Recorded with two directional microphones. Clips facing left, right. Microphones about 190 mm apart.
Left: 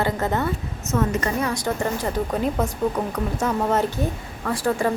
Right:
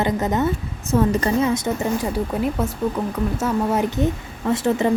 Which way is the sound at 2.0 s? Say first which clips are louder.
Right 1 dB; 5° right (ahead or behind).